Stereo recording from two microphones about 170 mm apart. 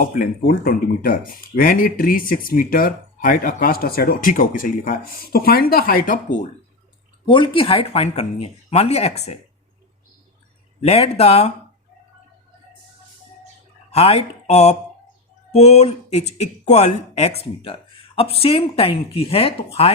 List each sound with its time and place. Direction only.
0.0 s speech: 55° left (ahead or behind)
7.3 s speech: 30° left (ahead or behind)
10.8 s speech: 40° left (ahead or behind)
13.9 s speech: 40° left (ahead or behind)